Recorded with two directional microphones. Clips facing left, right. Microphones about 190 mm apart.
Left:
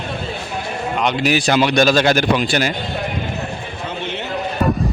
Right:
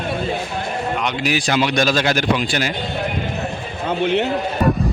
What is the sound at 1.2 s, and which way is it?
Speech, 65° left (ahead or behind).